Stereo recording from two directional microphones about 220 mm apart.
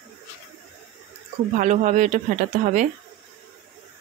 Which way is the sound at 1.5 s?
35° right (ahead or behind).